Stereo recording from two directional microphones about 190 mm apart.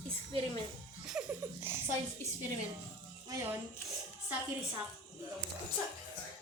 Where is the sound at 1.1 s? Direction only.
5° right (ahead or behind).